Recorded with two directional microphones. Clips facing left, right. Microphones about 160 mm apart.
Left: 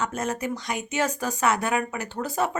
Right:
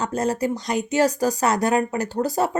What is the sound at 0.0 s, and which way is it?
Speech, 35° right (ahead or behind).